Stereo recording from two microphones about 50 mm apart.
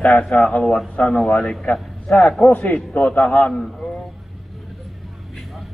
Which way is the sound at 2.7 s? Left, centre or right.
Left.